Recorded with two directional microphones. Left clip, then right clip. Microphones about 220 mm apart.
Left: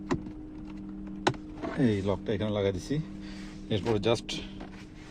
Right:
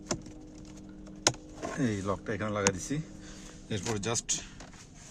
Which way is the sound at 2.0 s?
20° right (ahead or behind).